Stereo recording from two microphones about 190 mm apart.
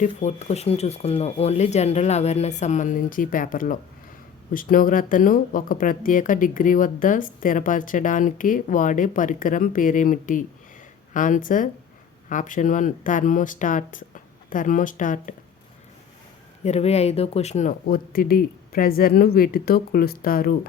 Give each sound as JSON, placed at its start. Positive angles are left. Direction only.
{"t": 0.0, "sound": "speech", "side_deg": 35}
{"t": 16.6, "sound": "speech", "side_deg": 35}